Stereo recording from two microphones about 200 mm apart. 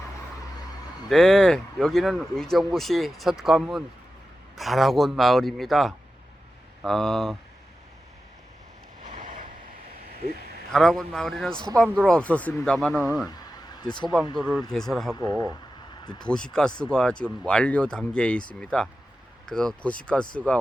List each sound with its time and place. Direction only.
1.1 s a man's voice: centre (ahead or behind)
9.0 s vehicle: 40° right (ahead or behind)
10.2 s a sound: 50° right (ahead or behind)
10.7 s a man's voice: centre (ahead or behind)
13.8 s speech: 20° left (ahead or behind)
14.6 s a man's voice: centre (ahead or behind)
15.1 s speech: 15° left (ahead or behind)
16.3 s a man's voice: 5° left (ahead or behind)